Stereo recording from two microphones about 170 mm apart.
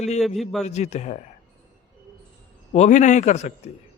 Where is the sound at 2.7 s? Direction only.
45° left (ahead or behind).